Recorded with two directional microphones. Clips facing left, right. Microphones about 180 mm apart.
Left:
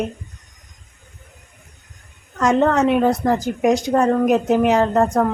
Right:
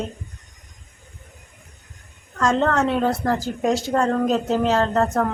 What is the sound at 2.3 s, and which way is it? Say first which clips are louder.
A woman's voice: left 3 dB; 15° left (ahead or behind).